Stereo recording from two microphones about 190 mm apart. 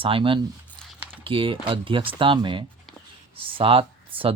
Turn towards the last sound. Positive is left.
turn(degrees=-30)  # may be behind; listen again after turning